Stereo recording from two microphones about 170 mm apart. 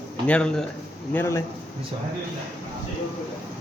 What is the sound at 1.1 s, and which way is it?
Speech, 15° left (ahead or behind).